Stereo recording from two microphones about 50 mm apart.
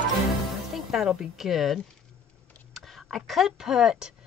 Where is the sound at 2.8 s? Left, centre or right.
Centre.